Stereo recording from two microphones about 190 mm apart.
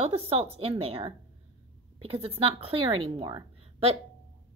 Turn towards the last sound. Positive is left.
turn(degrees=-25)  # may be behind; listen again after turning